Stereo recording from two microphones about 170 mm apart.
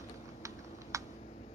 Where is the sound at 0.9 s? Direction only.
20° right (ahead or behind).